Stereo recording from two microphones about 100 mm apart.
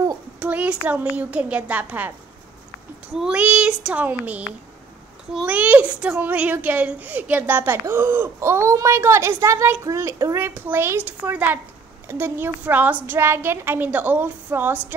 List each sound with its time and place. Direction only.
0.4 s a child's voice: 15° right (ahead or behind)
5.5 s a woman's voice: 15° right (ahead or behind)